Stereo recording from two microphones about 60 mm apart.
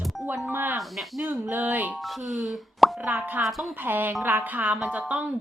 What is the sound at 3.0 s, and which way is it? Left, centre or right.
A woman's voice, right.